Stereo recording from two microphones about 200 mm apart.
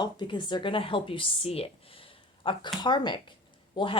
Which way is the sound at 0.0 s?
20° left (ahead or behind).